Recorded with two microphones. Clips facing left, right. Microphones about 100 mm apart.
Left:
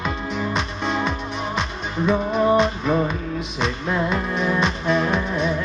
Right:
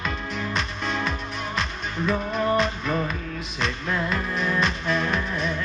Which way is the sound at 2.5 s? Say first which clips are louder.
Left 5 dB; 5° left (ahead or behind).